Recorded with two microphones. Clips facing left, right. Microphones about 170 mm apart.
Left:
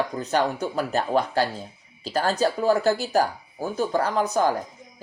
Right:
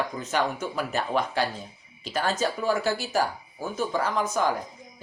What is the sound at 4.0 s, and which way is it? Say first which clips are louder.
Speech: left 3 dB; 60° left (ahead or behind).